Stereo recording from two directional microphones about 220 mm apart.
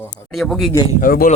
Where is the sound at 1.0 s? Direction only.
40° left (ahead or behind).